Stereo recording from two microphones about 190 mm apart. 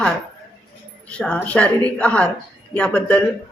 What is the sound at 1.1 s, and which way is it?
A woman's voice, 5° left (ahead or behind).